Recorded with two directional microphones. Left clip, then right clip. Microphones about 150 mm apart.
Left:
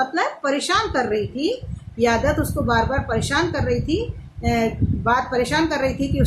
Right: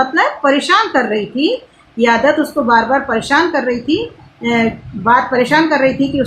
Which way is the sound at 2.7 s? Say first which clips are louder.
Right 8 dB; 30° right (ahead or behind).